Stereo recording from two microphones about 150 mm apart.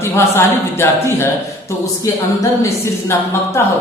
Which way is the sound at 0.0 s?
15° left (ahead or behind).